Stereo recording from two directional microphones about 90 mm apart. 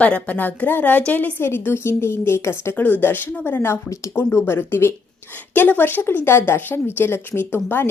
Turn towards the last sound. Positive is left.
turn(degrees=25)  # may be behind; listen again after turning